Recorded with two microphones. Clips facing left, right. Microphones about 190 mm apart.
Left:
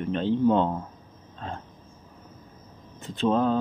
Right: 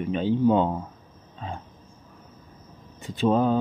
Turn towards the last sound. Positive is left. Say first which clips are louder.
# right 2 dB
turn(degrees=-10)  # may be behind; listen again after turning